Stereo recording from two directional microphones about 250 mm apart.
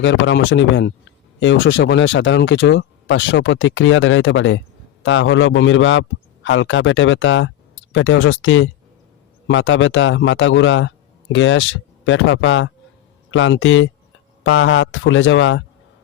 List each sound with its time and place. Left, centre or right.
0.0 s speech: left